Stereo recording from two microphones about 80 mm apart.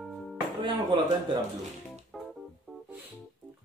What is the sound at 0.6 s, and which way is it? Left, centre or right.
Speech, right.